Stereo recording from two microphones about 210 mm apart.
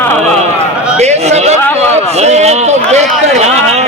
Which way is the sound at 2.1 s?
30° right (ahead or behind).